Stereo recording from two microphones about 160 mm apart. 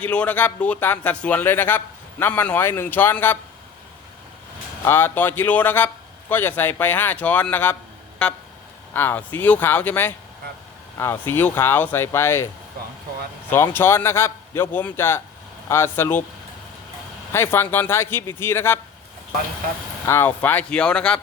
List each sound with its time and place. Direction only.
0.0 s a man's voice: 10° left (ahead or behind)
4.9 s a man's voice: 15° left (ahead or behind)
8.2 s vehicle: 5° left (ahead or behind)
8.9 s a man's voice: 10° left (ahead or behind)
13.5 s a man's voice: 15° left (ahead or behind)
17.3 s a man's voice: 15° left (ahead or behind)
20.1 s a man's voice: 15° left (ahead or behind)